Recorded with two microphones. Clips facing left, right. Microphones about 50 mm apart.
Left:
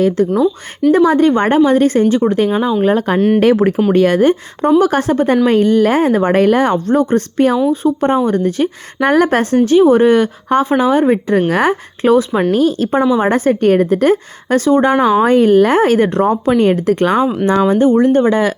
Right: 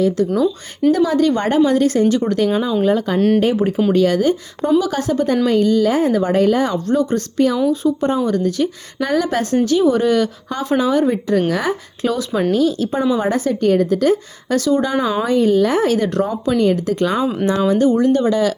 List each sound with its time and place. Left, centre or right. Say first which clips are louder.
0.2 s speech: left 3 dB; left
2.8 s speech: left 3 dB; left
3.2 s speech: left 2 dB; centre
3.4 s speech: left 6 dB; left
3.9 s speech: left 5 dB; left
17.7 s speech: left 3 dB; left